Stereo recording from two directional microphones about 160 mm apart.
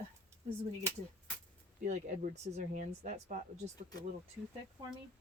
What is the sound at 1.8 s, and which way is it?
Speech, 50° right (ahead or behind).